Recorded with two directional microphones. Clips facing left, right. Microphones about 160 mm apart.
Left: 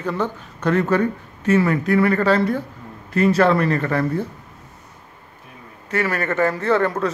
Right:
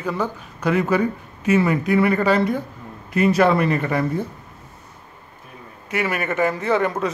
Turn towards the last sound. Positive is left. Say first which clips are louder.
# left 1 dB
turn(degrees=-15)  # may be behind; listen again after turning